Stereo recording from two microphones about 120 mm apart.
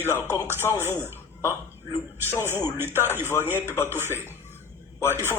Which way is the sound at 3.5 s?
20° left (ahead or behind).